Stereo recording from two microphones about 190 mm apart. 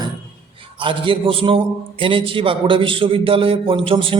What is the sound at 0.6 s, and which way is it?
A man's voice, 25° right (ahead or behind).